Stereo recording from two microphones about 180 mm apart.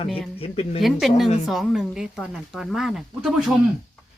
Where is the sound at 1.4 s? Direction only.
Centre (ahead or behind).